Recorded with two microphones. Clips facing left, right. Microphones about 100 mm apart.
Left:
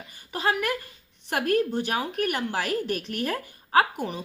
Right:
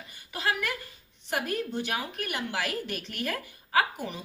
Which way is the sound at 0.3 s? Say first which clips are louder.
Left 4 dB; 40° left (ahead or behind).